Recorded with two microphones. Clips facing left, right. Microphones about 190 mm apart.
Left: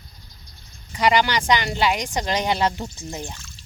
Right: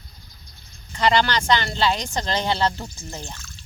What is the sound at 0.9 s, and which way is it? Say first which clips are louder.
Speech: even; 10° left (ahead or behind).